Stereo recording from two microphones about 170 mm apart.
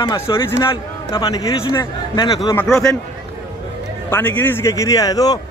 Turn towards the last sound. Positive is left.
turn(degrees=20)  # may be behind; listen again after turning